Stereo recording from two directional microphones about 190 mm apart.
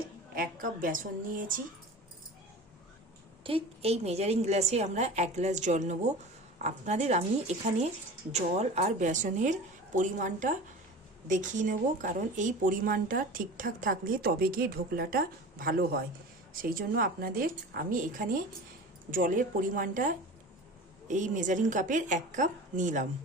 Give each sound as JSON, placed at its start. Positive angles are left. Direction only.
{"t": 0.3, "sound": "speech", "side_deg": -45}
{"t": 3.4, "sound": "a woman's voice", "side_deg": -30}